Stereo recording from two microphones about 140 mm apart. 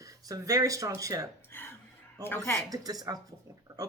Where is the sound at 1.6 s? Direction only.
15° left (ahead or behind).